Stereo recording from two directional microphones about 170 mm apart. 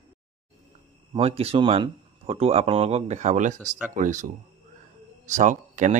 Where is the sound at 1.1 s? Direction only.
35° right (ahead or behind).